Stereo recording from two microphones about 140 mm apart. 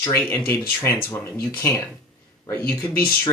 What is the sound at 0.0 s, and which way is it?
Speech, 20° left (ahead or behind).